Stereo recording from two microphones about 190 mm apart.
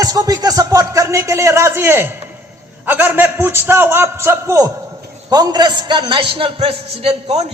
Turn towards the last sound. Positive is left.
turn(degrees=-30)  # may be behind; listen again after turning